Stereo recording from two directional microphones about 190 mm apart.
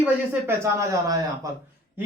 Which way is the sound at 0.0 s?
15° right (ahead or behind).